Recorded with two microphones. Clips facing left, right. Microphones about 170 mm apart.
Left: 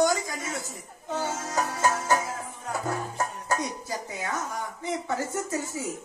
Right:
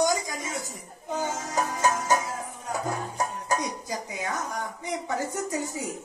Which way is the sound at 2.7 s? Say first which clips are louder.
Even; 15° right (ahead or behind).